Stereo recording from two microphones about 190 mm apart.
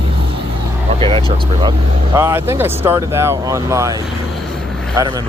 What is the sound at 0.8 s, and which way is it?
Speech, 30° right (ahead or behind).